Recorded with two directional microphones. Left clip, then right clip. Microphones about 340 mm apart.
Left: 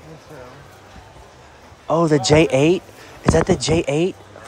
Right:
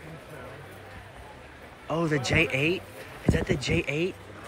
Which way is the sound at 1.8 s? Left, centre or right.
Centre.